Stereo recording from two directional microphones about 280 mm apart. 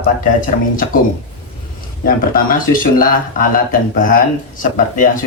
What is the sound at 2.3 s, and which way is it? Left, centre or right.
Speech, left.